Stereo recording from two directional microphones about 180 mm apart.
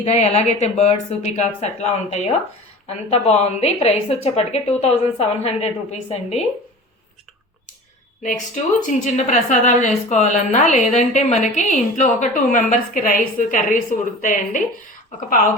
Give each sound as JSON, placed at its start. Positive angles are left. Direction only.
{"t": 0.0, "sound": "a woman's voice", "side_deg": 35}
{"t": 8.9, "sound": "a woman's voice", "side_deg": 45}